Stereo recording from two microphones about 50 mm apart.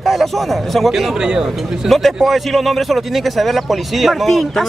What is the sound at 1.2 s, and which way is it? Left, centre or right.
Speech, centre.